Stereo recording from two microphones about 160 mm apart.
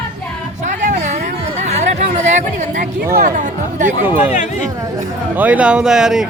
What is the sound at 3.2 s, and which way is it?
Speech, 55° right (ahead or behind).